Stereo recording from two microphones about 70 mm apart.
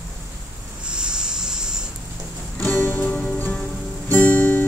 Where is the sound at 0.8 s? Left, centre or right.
Centre.